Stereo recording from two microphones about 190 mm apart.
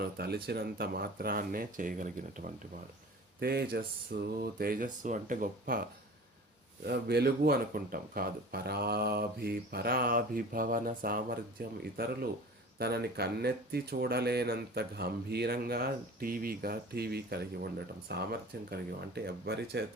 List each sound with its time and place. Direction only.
0.0 s speech: 55° right (ahead or behind)
3.4 s speech: 55° right (ahead or behind)
6.8 s speech: 55° right (ahead or behind)